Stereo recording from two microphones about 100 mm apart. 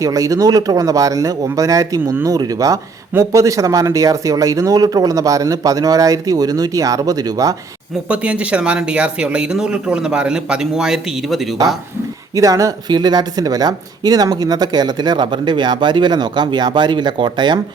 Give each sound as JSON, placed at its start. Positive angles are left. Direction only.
{"t": 0.0, "sound": "speech", "side_deg": -35}
{"t": 8.0, "sound": "speech", "side_deg": -10}
{"t": 12.3, "sound": "speech", "side_deg": -35}